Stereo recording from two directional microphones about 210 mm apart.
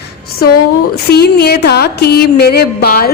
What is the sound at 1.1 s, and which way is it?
A woman's voice, 50° left (ahead or behind).